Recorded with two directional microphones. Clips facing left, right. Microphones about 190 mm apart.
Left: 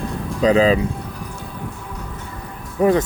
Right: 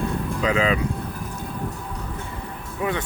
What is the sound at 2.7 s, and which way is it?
Speech, 40° left (ahead or behind).